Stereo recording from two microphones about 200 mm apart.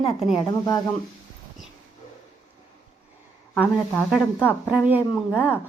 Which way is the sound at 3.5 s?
5° left (ahead or behind).